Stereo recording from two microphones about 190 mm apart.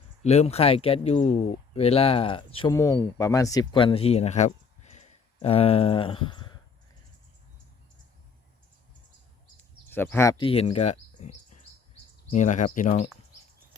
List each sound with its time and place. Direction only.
0.2 s speech: 35° left (ahead or behind)
9.9 s speech: 10° left (ahead or behind)
10.3 s speech: 30° left (ahead or behind)